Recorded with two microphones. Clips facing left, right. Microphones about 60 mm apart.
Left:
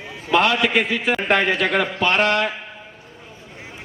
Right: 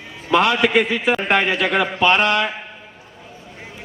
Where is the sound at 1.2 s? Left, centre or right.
Centre.